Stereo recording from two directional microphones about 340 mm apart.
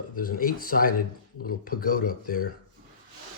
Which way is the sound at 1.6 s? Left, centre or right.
Left.